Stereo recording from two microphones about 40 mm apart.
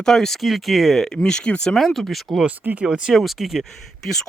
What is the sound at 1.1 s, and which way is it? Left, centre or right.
Speech, left.